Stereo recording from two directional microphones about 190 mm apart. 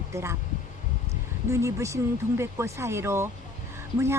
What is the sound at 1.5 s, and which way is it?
A woman's voice, 15° right (ahead or behind).